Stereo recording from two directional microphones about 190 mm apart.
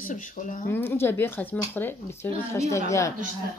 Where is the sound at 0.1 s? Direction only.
45° left (ahead or behind).